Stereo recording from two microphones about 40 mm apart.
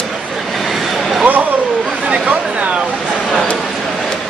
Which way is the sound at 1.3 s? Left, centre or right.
Right.